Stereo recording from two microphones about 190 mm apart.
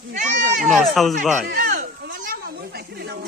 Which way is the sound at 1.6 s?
45° right (ahead or behind).